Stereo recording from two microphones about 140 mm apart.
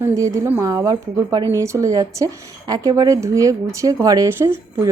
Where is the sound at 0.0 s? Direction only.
25° right (ahead or behind).